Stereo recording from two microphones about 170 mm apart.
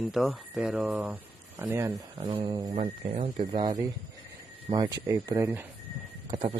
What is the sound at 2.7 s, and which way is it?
A man's voice, 35° right (ahead or behind).